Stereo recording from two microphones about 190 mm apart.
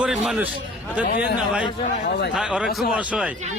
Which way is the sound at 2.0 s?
60° left (ahead or behind).